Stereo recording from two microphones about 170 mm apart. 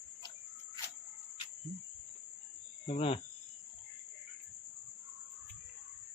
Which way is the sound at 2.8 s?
35° left (ahead or behind).